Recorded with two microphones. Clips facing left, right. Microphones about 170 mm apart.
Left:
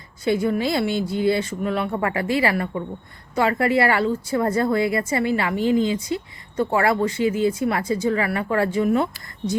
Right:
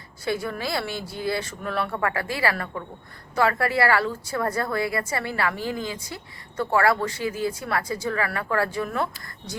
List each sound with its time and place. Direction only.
0.3 s a woman's voice: 20° left (ahead or behind)